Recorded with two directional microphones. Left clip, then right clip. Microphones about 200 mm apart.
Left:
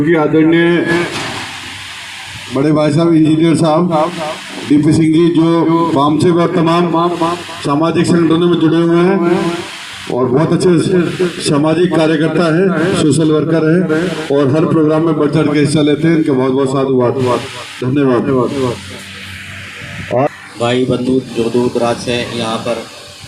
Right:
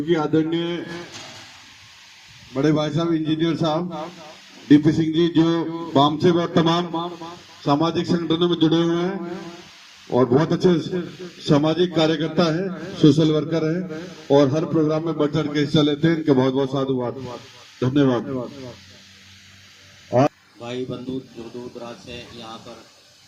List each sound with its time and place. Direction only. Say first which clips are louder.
0.1 s a man's voice: left 9 dB; 15° left (ahead or behind)
2.6 s a man's voice: left 9 dB; 20° left (ahead or behind)
20.1 s a man's voice: left 5 dB; 30° left (ahead or behind)
20.6 s speech: left 19 dB; 40° left (ahead or behind)